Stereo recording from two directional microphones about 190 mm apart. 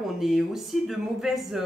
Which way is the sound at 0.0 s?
Centre (ahead or behind).